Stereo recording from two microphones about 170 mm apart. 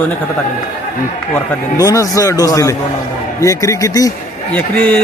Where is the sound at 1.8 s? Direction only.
20° left (ahead or behind).